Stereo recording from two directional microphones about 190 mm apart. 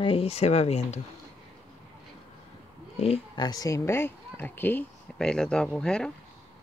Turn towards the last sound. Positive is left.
turn(degrees=5)  # may be behind; listen again after turning